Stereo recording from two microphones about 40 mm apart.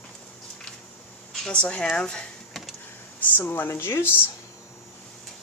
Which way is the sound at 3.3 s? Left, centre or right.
Left.